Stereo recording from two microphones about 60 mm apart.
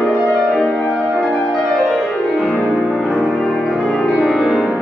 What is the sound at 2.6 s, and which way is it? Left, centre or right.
Music, centre.